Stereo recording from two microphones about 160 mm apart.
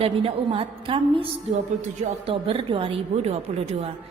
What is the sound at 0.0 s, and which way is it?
A woman's voice, 35° right (ahead or behind).